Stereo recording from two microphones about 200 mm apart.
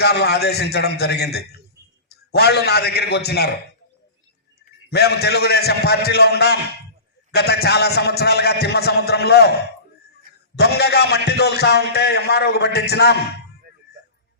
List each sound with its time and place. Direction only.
0.0 s a man's voice: 55° left (ahead or behind)
4.9 s a man's voice: 55° left (ahead or behind)
10.5 s a man's voice: 55° left (ahead or behind)